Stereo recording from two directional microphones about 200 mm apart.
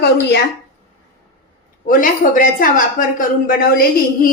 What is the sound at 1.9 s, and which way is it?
Speech, 45° left (ahead or behind).